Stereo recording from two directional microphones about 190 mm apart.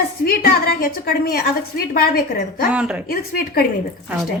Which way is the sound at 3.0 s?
50° left (ahead or behind).